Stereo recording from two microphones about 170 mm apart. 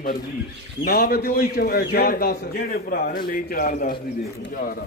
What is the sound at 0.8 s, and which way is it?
A man's voice, 65° left (ahead or behind).